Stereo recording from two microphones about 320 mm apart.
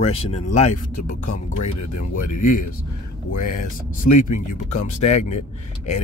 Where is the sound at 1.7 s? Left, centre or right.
Left.